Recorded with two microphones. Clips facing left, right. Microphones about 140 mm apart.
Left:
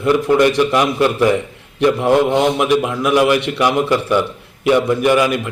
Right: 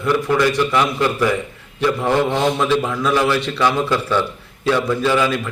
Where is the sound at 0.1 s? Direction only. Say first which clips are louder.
Left 4 dB; 20° left (ahead or behind).